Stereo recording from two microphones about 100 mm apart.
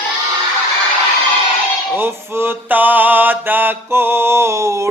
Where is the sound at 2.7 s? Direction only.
15° right (ahead or behind).